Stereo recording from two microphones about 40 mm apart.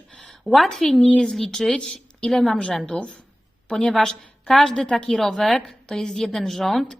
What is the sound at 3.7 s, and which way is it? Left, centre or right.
Speech, left.